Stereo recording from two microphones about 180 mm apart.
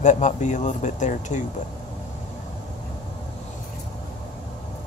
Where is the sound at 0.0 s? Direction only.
45° left (ahead or behind).